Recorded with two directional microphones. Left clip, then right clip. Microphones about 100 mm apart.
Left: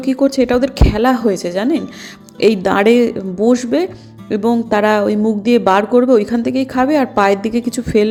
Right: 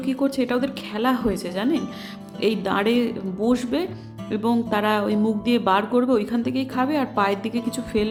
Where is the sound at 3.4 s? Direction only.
45° left (ahead or behind).